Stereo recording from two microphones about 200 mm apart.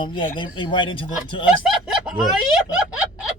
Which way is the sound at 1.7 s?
5° right (ahead or behind).